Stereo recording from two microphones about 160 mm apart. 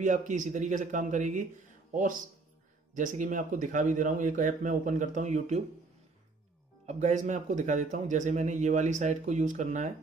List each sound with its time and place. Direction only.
0.0 s speech: 50° right (ahead or behind)
6.9 s speech: 45° right (ahead or behind)